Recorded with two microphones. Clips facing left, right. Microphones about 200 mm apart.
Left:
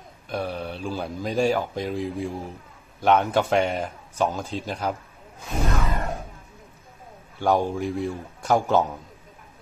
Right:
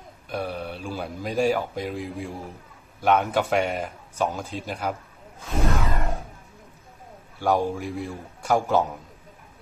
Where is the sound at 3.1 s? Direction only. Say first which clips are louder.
Left 1 dB; 30° left (ahead or behind).